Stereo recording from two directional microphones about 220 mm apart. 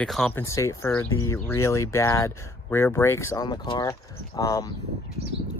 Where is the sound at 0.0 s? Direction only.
5° left (ahead or behind).